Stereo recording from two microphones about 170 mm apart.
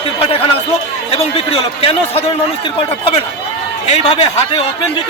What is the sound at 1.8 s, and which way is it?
Speech, 35° left (ahead or behind).